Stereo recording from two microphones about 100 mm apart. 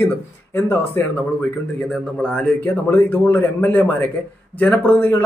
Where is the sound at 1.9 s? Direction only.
10° left (ahead or behind).